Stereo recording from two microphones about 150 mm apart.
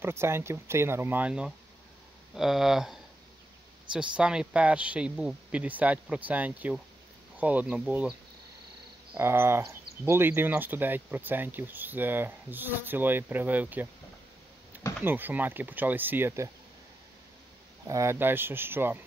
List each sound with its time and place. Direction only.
0.0 s speech: 15° right (ahead or behind)
9.1 s speech: 15° right (ahead or behind)
15.0 s speech: 15° right (ahead or behind)
17.8 s speech: 20° right (ahead or behind)